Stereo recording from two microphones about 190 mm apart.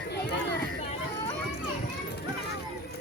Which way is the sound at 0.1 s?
60° left (ahead or behind).